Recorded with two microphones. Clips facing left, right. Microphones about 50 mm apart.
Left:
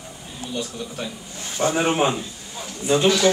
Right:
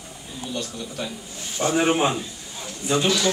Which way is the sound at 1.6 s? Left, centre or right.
Left.